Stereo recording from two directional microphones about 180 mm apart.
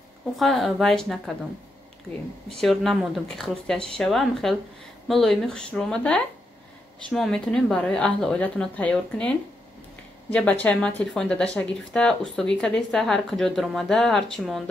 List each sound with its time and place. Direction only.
0.4 s a woman's voice: centre (ahead or behind)
2.5 s a woman's voice: centre (ahead or behind)
10.3 s a woman's voice: 10° left (ahead or behind)